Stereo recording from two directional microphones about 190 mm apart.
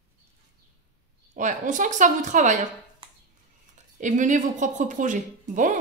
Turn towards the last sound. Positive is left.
turn(degrees=-40)  # may be behind; listen again after turning